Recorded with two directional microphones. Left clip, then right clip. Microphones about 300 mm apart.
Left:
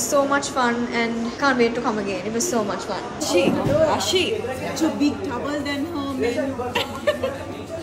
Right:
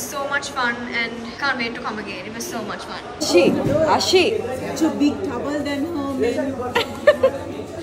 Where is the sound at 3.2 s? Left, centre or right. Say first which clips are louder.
Right 4 dB; centre.